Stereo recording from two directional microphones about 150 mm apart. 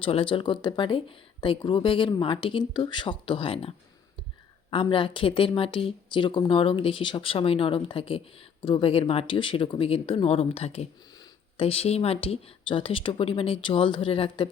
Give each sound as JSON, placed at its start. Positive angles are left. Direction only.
{"t": 0.0, "sound": "speech", "side_deg": 35}